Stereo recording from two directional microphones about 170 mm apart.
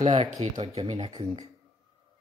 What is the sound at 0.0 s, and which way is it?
Speech, 45° right (ahead or behind).